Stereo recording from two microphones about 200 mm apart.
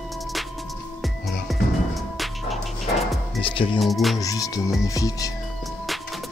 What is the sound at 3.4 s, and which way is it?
Speech, 25° left (ahead or behind).